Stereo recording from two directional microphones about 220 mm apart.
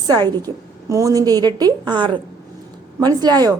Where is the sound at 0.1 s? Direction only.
15° right (ahead or behind).